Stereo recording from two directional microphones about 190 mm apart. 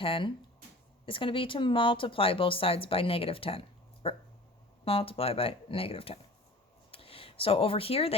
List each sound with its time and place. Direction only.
0.0 s speech: 25° left (ahead or behind)